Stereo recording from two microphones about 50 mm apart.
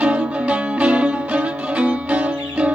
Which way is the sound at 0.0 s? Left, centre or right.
Right.